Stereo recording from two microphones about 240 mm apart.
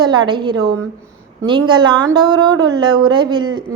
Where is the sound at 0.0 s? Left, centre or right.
Centre.